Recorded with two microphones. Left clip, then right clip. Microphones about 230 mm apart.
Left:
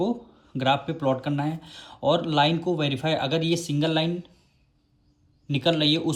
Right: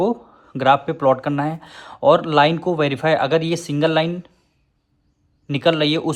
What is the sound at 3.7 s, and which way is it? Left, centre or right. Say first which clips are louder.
Speech: right 7 dB; right.